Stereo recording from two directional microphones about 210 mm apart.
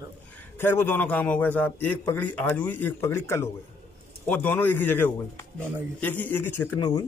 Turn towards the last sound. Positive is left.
turn(degrees=10)  # may be behind; listen again after turning